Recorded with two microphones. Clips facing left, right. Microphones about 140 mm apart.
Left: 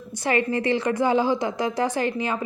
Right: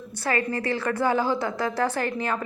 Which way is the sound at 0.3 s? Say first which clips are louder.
Left 4 dB; 20° left (ahead or behind).